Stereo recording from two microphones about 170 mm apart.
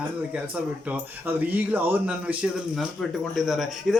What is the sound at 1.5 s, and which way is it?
Speech, 10° right (ahead or behind).